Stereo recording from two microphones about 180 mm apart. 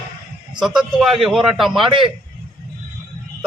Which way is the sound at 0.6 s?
5° right (ahead or behind).